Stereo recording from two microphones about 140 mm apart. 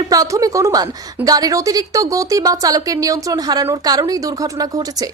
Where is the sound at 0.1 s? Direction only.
25° right (ahead or behind).